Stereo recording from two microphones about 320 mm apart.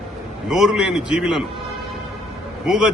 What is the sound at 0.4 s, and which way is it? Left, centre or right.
A man's voice, centre.